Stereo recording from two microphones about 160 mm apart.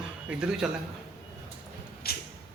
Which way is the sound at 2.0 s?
75° left (ahead or behind).